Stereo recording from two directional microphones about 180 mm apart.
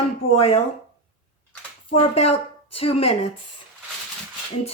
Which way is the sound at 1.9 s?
35° left (ahead or behind).